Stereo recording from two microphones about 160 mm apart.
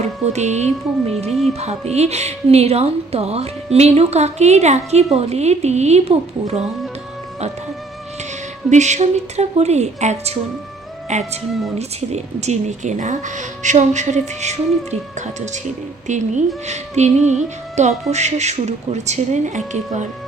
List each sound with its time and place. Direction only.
0.0 s speech: 45° right (ahead or behind)
1.3 s music: centre (ahead or behind)
1.5 s a woman's voice: 40° right (ahead or behind)
8.7 s speech: 45° right (ahead or behind)
16.0 s speech: 50° right (ahead or behind)